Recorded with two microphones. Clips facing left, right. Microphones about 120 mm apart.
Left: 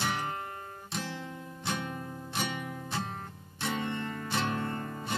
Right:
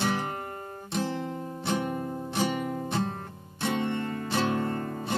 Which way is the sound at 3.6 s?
30° right (ahead or behind).